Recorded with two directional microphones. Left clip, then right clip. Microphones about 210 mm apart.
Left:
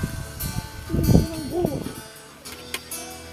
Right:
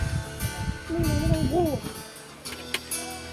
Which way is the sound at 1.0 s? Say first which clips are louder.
Left 9 dB; 50° right (ahead or behind).